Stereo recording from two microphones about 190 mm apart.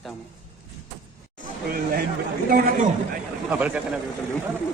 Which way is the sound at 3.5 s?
10° right (ahead or behind).